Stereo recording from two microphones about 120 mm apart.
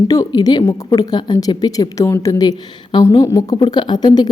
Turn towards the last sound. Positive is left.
turn(degrees=40)  # may be behind; listen again after turning